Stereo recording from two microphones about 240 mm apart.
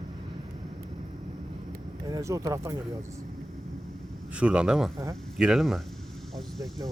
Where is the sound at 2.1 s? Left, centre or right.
Centre.